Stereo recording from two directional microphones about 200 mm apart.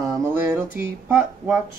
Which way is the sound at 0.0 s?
15° right (ahead or behind).